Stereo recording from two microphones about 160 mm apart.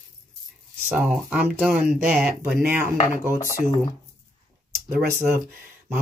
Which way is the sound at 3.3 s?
60° left (ahead or behind).